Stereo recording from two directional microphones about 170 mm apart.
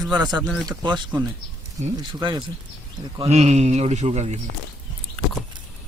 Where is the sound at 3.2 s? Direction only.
40° right (ahead or behind).